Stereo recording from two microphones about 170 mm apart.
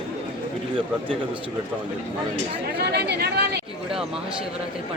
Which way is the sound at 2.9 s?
70° right (ahead or behind).